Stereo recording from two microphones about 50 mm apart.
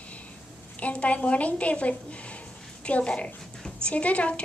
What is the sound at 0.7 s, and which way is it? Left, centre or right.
A woman's voice, left.